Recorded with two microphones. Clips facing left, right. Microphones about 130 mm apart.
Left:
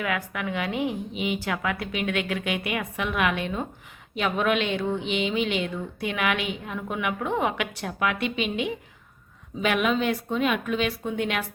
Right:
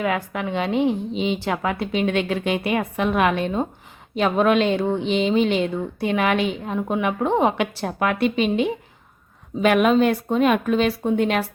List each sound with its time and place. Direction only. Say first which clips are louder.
0.0 s speech: right 5 dB; 30° right (ahead or behind)